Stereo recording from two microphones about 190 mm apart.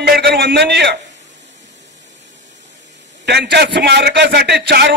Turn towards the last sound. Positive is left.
turn(degrees=-60)  # may be behind; listen again after turning